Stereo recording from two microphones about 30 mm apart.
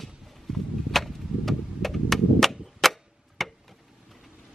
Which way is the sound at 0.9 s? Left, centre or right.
Centre.